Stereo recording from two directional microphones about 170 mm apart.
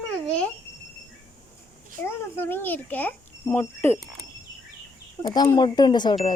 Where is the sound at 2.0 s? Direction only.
10° left (ahead or behind).